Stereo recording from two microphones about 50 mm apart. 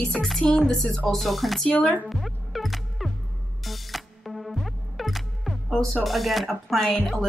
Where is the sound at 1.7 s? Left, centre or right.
Left.